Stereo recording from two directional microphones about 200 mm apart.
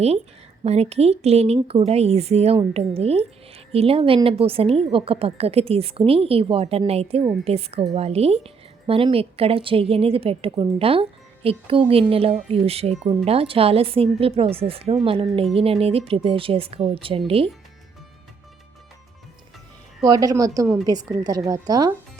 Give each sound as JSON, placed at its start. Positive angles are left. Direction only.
{"t": 0.6, "sound": "a woman's voice", "side_deg": -30}
{"t": 20.1, "sound": "a woman's voice", "side_deg": -20}